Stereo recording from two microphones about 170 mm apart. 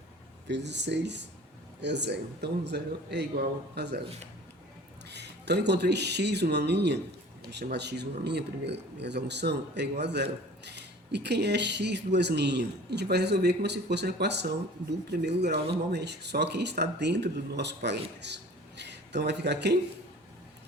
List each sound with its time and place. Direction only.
0.4 s a man's voice: 90° right; by 4.0 s 75° right (ahead or behind)
5.0 s a man's voice: 85° right